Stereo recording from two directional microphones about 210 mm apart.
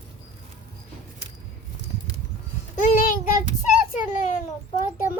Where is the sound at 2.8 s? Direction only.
40° left (ahead or behind).